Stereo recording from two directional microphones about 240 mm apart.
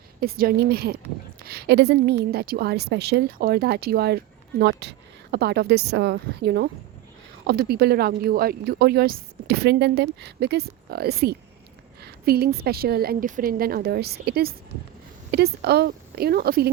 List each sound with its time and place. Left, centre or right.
0.2 s a woman's voice: right